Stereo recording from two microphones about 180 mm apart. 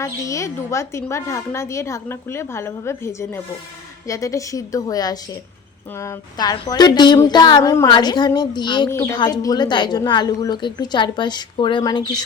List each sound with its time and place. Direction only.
0.0 s a woman's voice: 15° left (ahead or behind)